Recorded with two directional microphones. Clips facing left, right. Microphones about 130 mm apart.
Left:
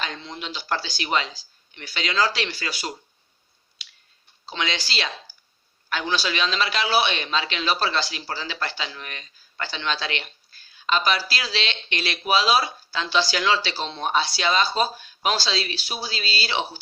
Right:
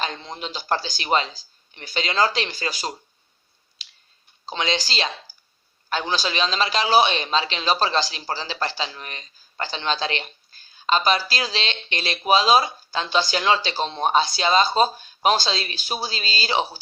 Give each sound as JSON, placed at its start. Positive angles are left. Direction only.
{"t": 0.2, "sound": "a man's voice", "side_deg": -40}
{"t": 2.5, "sound": "a man's voice", "side_deg": -40}
{"t": 4.4, "sound": "a man's voice", "side_deg": -35}
{"t": 13.3, "sound": "speech", "side_deg": -25}
{"t": 14.0, "sound": "a man's voice", "side_deg": -45}